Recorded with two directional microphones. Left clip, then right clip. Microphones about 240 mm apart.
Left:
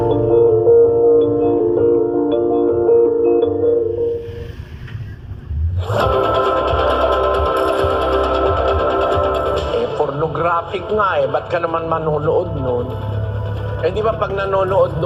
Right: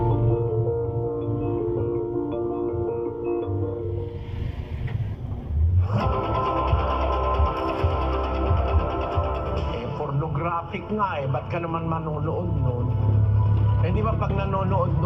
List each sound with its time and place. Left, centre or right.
0.0 s music: left
1.1 s singing bowl: left
5.9 s music: left
13.8 s speech: left